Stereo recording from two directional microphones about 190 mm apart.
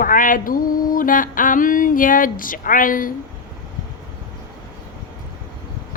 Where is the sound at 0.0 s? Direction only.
45° left (ahead or behind).